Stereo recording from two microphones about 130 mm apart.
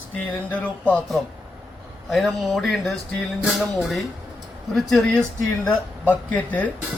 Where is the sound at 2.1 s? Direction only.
Centre (ahead or behind).